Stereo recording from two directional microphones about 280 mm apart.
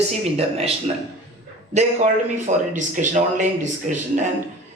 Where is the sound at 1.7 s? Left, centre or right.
Right.